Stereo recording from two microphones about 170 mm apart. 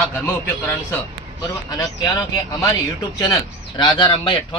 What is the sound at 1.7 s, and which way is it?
Speech, 20° left (ahead or behind).